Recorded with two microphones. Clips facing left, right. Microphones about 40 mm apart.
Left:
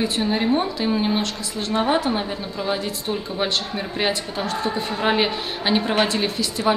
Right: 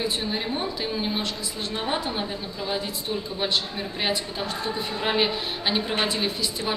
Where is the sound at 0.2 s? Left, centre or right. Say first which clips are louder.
Left 8 dB; centre.